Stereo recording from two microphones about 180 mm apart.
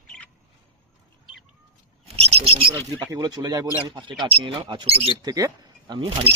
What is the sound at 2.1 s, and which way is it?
Speech, 35° right (ahead or behind).